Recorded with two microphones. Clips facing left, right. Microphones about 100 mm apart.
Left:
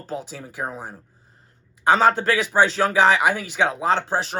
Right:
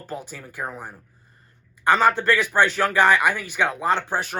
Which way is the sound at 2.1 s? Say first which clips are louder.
Left 1 dB; 15° left (ahead or behind).